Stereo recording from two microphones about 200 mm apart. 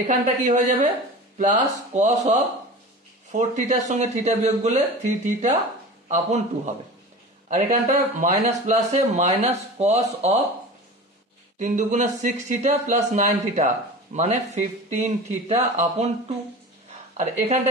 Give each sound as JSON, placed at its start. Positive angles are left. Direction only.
{"t": 0.0, "sound": "speech", "side_deg": -40}
{"t": 11.5, "sound": "speech", "side_deg": -35}
{"t": 17.2, "sound": "speech", "side_deg": -35}